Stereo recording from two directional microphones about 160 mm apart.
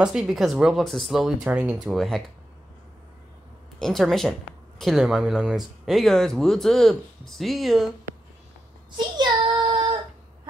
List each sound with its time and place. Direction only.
0.0 s speech: 5° right (ahead or behind)
3.8 s speech: centre (ahead or behind)
8.9 s child singing: 30° right (ahead or behind)